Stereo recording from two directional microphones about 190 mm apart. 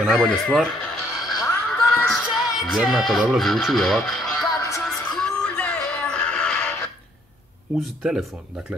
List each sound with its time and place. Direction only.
0.0 s speech: centre (ahead or behind)
1.3 s music: 15° left (ahead or behind)
4.6 s music: 15° left (ahead or behind)
4.8 s music: centre (ahead or behind)
7.8 s speech: centre (ahead or behind)